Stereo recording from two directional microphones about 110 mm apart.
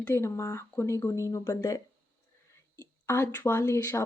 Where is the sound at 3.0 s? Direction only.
25° left (ahead or behind).